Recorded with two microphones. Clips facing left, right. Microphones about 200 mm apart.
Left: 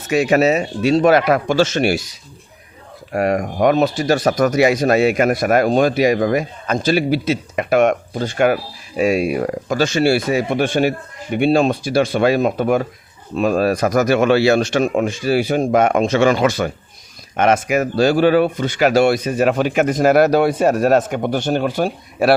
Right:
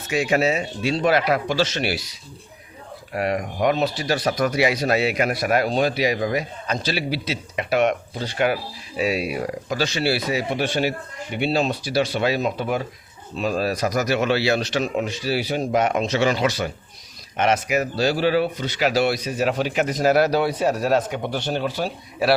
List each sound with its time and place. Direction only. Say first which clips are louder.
0.1 s speech: left 6 dB; 65° left (ahead or behind)
0.9 s speech: left 7 dB; 45° left (ahead or behind)
3.2 s speech: left 6 dB; 45° left (ahead or behind)